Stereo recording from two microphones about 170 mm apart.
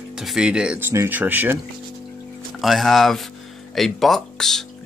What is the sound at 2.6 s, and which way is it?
Speech, centre (ahead or behind).